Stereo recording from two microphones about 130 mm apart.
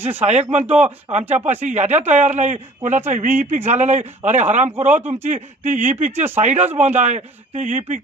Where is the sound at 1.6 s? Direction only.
60° right (ahead or behind).